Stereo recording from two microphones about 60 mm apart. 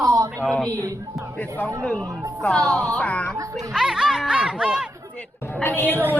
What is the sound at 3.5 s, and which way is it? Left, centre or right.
Speech, centre.